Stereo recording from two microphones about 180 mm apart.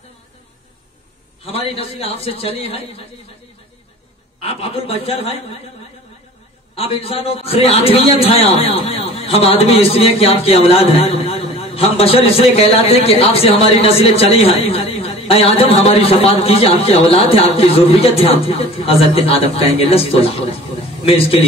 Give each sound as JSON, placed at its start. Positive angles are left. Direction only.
{"t": 1.4, "sound": "a man's voice", "side_deg": 30}
{"t": 4.4, "sound": "a man's voice", "side_deg": 30}
{"t": 6.7, "sound": "a man's voice", "side_deg": 35}